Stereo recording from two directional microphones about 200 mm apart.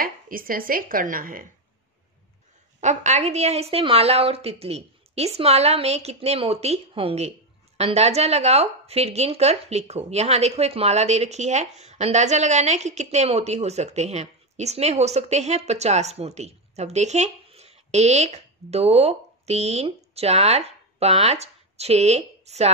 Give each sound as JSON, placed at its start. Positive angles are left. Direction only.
{"t": 0.0, "sound": "speech", "side_deg": -45}
{"t": 2.8, "sound": "a woman's voice", "side_deg": -35}